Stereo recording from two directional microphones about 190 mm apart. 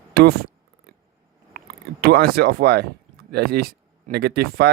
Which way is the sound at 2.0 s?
55° right (ahead or behind).